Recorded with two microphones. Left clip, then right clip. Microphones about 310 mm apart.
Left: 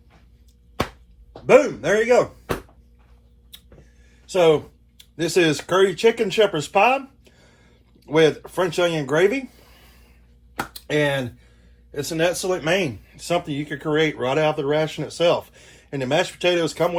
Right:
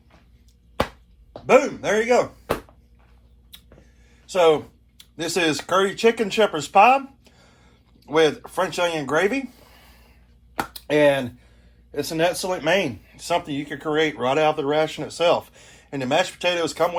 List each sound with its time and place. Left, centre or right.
1.5 s speech: right
4.4 s speech: right